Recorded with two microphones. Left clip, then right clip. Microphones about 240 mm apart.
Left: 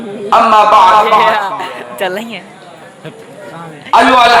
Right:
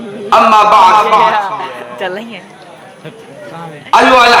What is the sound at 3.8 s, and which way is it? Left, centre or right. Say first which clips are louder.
Speech: even; right.